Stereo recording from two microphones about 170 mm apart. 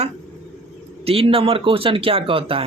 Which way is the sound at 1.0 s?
35° right (ahead or behind).